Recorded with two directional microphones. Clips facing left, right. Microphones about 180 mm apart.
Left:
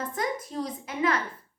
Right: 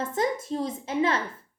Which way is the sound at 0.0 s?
25° right (ahead or behind).